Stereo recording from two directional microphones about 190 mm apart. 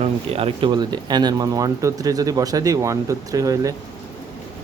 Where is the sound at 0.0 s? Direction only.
30° right (ahead or behind).